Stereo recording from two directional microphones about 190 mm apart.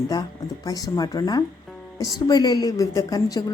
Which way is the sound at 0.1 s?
20° left (ahead or behind).